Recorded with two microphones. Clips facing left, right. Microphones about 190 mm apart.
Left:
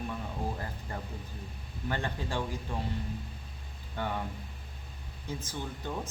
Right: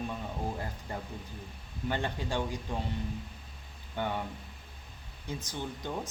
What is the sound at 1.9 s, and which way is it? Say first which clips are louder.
Speech: right 1 dB; 20° right (ahead or behind).